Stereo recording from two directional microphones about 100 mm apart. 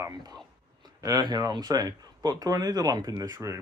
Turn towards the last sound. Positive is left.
turn(degrees=-35)  # may be behind; listen again after turning